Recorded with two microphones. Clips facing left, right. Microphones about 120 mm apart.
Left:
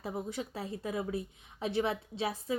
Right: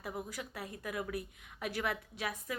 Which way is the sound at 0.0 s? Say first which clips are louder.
Left 5 dB; 25° left (ahead or behind).